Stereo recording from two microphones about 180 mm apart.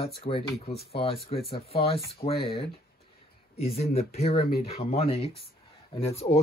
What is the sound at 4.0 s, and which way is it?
Speech, 35° left (ahead or behind).